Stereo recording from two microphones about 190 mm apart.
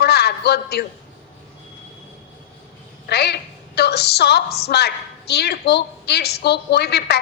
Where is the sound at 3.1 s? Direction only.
60° left (ahead or behind).